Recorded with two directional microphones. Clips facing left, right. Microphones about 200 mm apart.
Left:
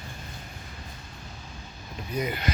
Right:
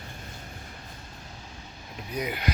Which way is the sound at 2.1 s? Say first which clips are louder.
Left 2 dB; 10° right (ahead or behind).